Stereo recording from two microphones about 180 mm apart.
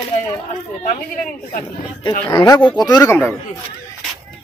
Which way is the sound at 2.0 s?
25° left (ahead or behind).